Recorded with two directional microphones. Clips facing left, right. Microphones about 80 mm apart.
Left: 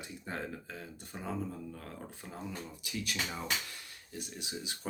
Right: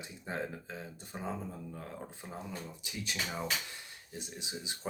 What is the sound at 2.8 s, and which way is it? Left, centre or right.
Speech, right.